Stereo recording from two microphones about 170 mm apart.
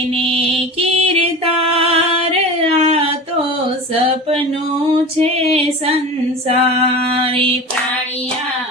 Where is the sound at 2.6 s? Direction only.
35° right (ahead or behind).